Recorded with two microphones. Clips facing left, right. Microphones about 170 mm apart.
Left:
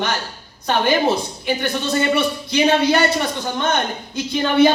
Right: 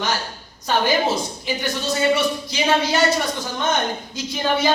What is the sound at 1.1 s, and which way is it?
A man's voice, 60° left (ahead or behind).